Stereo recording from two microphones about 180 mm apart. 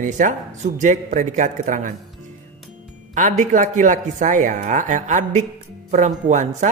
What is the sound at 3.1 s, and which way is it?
A man's voice, 45° right (ahead or behind).